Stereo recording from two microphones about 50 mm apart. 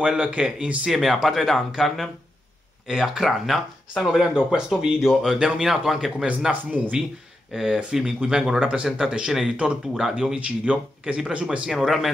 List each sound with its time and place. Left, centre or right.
0.0 s speech: right
0.9 s speech: centre
4.3 s speech: centre
6.1 s speech: centre
7.5 s speech: centre
10.3 s speech: right